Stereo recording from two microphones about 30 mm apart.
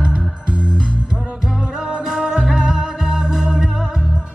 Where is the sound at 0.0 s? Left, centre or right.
Right.